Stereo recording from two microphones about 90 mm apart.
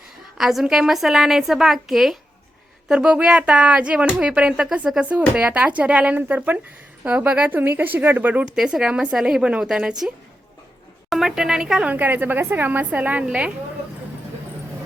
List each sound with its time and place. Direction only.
0.3 s a woman's voice: 5° right (ahead or behind)
8.5 s a woman's voice: 5° right (ahead or behind)
11.1 s a woman's voice: 5° right (ahead or behind)